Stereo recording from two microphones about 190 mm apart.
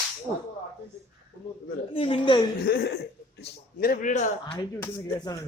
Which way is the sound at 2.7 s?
55° left (ahead or behind).